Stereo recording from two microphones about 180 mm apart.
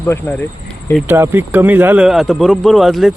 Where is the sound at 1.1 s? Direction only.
10° right (ahead or behind).